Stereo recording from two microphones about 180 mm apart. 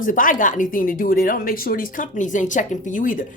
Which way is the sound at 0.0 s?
50° left (ahead or behind).